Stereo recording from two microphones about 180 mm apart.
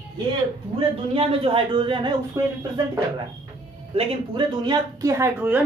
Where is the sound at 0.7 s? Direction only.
30° right (ahead or behind).